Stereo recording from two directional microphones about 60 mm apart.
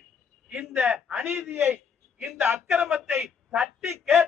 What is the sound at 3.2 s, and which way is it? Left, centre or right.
Speech, right.